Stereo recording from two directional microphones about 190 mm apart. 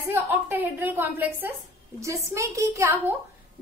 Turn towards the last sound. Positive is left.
turn(degrees=-15)  # may be behind; listen again after turning